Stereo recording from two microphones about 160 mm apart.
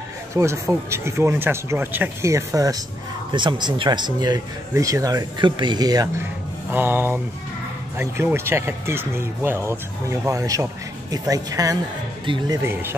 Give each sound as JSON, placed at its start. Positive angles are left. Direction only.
{"t": 0.3, "sound": "speech", "side_deg": -20}
{"t": 6.7, "sound": "speech", "side_deg": -15}